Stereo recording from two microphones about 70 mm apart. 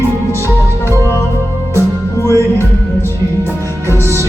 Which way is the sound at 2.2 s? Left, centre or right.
Left.